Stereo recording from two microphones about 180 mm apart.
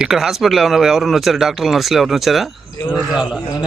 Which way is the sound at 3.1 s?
5° right (ahead or behind).